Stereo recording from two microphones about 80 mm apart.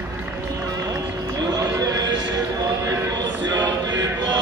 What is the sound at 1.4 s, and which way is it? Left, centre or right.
Run, right.